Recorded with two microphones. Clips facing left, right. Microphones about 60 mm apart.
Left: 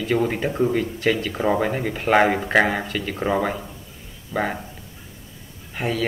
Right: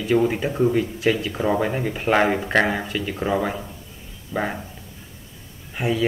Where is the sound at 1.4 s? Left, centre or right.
Centre.